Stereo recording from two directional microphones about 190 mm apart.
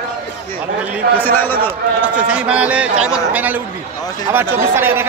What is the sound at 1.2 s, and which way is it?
Speech, 10° left (ahead or behind).